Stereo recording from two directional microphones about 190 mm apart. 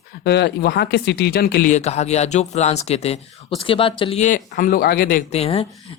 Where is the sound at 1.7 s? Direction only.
35° left (ahead or behind); by 5.2 s 50° left (ahead or behind).